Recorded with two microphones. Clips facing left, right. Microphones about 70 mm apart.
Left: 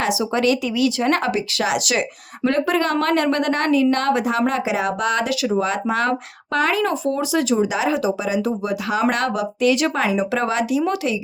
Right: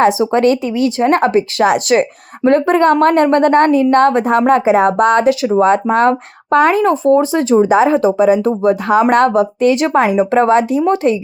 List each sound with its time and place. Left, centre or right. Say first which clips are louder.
0.0 s speech: right 8 dB; right